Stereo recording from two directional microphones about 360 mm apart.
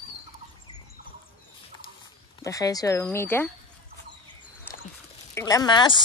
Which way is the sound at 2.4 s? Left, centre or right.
Centre.